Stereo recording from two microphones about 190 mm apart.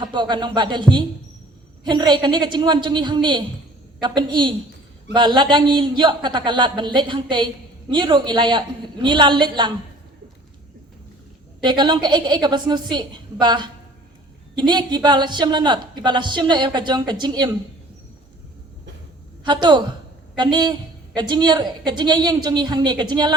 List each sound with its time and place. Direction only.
0.0 s a man's voice: 25° right (ahead or behind)
11.6 s a man's voice: 25° right (ahead or behind)
19.5 s a man's voice: 25° right (ahead or behind)